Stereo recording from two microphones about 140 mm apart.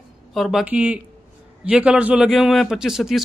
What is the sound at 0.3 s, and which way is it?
A man's voice, centre (ahead or behind).